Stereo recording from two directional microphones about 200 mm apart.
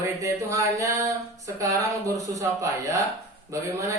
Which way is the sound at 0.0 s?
15° right (ahead or behind).